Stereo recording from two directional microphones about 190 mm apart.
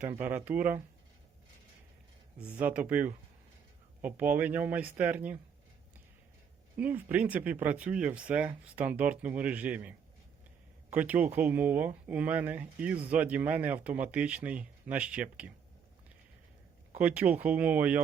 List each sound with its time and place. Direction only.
0.0 s speech: 10° right (ahead or behind)
2.4 s speech: 10° right (ahead or behind)
6.7 s speech: 10° right (ahead or behind)
17.0 s speech: 5° right (ahead or behind)